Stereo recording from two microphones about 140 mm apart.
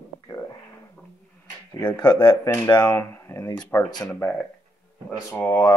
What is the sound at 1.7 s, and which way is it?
Speech, 25° left (ahead or behind).